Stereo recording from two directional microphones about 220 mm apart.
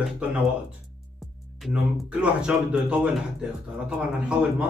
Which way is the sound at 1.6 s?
5° right (ahead or behind).